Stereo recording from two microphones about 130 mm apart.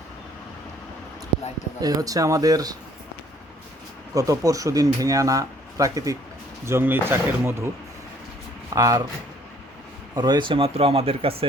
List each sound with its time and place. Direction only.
1.8 s speech: 30° right (ahead or behind)
4.1 s speech: 25° right (ahead or behind)
8.7 s speech: 25° right (ahead or behind)
10.2 s speech: 35° right (ahead or behind)